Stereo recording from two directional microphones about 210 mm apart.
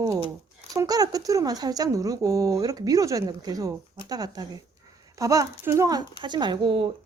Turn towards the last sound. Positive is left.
turn(degrees=-25)  # may be behind; listen again after turning